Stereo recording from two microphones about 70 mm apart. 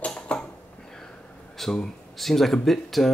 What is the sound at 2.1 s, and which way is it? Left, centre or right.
Speech, centre.